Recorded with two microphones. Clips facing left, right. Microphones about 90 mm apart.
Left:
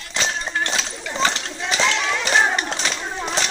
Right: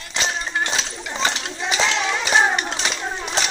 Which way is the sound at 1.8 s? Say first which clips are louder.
Even; 15° right (ahead or behind).